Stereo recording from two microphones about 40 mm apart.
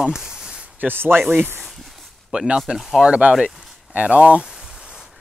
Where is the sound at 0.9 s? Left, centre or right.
Right.